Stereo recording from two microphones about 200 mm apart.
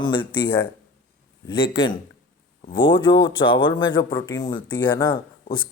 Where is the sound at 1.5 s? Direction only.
25° left (ahead or behind).